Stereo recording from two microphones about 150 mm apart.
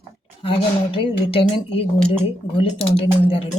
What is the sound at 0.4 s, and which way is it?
Speech, 35° left (ahead or behind).